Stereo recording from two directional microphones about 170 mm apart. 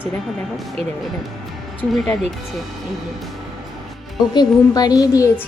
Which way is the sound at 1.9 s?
Centre (ahead or behind).